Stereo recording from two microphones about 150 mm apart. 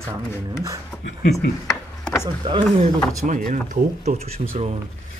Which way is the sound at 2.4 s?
30° right (ahead or behind).